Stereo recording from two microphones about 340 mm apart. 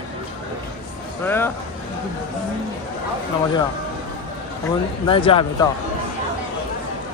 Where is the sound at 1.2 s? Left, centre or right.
Centre.